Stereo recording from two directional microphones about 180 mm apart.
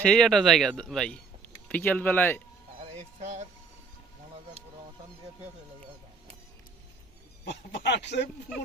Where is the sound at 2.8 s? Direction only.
40° right (ahead or behind).